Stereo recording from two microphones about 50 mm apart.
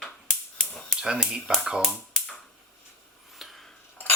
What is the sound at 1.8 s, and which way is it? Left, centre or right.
Speech, centre.